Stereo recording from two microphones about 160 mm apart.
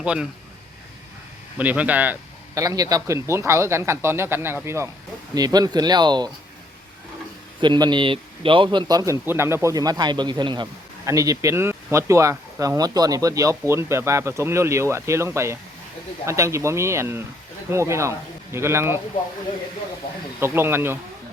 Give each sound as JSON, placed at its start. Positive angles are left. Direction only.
{"t": 0.0, "sound": "speech", "side_deg": -5}
{"t": 1.5, "sound": "speech", "side_deg": -10}
{"t": 2.6, "sound": "a man's voice", "side_deg": -20}
{"t": 7.6, "sound": "a man's voice", "side_deg": -30}
{"t": 20.4, "sound": "speech", "side_deg": -15}